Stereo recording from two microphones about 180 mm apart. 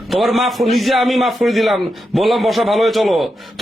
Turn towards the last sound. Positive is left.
turn(degrees=0)  # may be behind; listen again after turning